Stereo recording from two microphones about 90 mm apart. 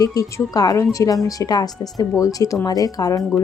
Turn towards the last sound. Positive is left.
turn(degrees=40)  # may be behind; listen again after turning